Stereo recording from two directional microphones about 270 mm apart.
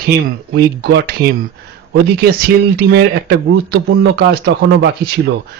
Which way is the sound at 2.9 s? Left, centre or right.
Right.